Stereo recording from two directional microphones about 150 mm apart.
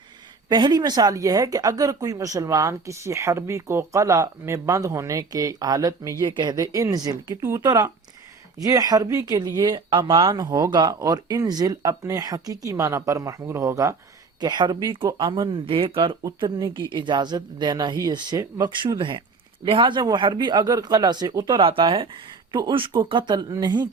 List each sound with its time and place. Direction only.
0.4 s speech: 30° right (ahead or behind)